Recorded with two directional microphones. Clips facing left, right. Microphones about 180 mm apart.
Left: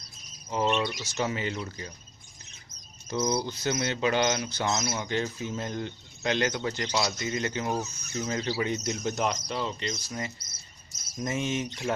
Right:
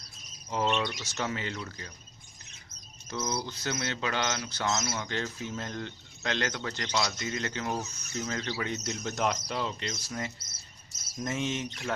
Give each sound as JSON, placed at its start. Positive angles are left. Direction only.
{"t": 0.5, "sound": "speech", "side_deg": 5}
{"t": 3.1, "sound": "speech", "side_deg": 15}
{"t": 9.1, "sound": "speech", "side_deg": 0}